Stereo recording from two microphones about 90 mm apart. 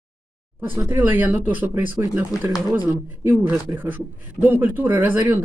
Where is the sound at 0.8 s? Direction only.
20° right (ahead or behind).